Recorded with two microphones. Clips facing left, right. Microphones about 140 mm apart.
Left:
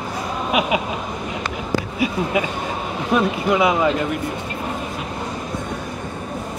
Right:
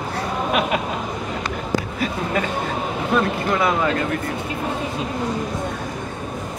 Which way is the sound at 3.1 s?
10° left (ahead or behind).